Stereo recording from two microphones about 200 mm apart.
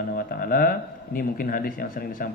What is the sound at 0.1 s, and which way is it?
Speech, 45° left (ahead or behind).